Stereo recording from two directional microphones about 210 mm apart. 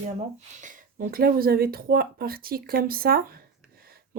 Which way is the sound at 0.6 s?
40° right (ahead or behind).